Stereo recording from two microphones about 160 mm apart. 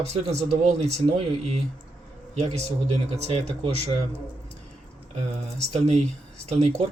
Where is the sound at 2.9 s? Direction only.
45° right (ahead or behind).